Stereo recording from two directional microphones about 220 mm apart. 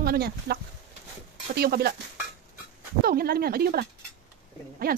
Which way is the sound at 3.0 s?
45° right (ahead or behind).